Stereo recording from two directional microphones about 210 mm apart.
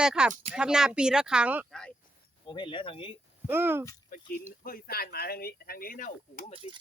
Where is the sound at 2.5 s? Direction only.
25° left (ahead or behind).